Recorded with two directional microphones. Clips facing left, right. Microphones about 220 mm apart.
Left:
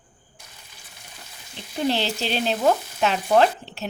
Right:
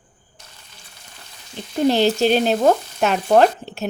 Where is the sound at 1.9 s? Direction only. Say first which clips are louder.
Right 9 dB; 50° right (ahead or behind).